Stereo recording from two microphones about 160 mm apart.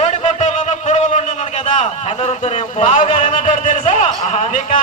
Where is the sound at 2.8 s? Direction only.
50° left (ahead or behind).